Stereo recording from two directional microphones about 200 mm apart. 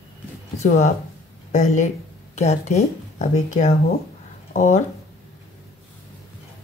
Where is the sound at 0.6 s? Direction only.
35° left (ahead or behind).